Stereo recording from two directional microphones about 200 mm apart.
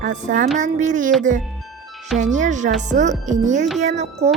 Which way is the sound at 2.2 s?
40° right (ahead or behind).